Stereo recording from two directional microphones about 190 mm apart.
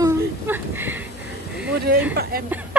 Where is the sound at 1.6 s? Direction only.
55° right (ahead or behind).